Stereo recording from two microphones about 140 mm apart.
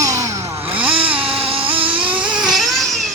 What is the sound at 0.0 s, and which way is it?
Chainsaw, 25° right (ahead or behind).